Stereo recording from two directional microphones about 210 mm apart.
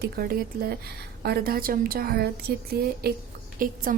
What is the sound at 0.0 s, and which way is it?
A woman's voice, 45° right (ahead or behind).